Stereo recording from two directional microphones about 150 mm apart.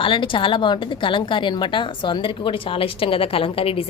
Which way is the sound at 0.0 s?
35° left (ahead or behind).